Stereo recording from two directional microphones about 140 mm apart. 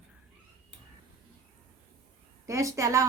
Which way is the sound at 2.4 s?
20° right (ahead or behind).